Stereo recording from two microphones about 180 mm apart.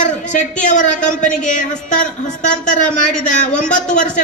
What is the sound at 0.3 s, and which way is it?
A woman's voice, 40° left (ahead or behind).